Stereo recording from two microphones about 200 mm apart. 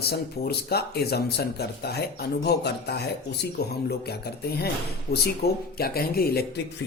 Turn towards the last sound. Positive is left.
turn(degrees=50)  # may be behind; listen again after turning